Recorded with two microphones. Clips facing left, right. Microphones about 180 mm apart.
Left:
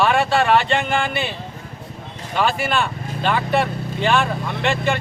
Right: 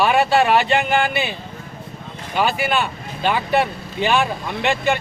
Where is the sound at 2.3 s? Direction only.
5° right (ahead or behind).